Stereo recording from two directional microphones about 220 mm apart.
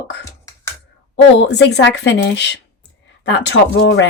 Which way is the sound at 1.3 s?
50° left (ahead or behind).